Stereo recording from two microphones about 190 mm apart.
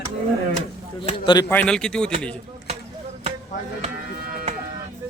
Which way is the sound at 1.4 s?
5° left (ahead or behind).